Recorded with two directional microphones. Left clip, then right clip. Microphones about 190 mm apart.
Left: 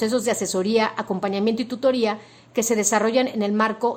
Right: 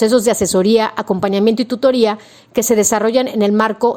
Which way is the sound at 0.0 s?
40° right (ahead or behind).